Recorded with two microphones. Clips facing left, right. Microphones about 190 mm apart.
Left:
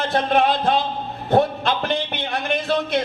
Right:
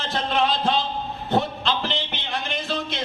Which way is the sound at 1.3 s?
60° left (ahead or behind).